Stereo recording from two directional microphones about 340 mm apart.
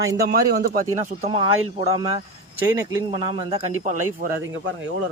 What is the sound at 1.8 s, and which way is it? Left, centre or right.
Speech, centre.